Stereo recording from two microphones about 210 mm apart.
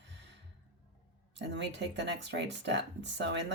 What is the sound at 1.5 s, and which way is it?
Speech, 55° right (ahead or behind).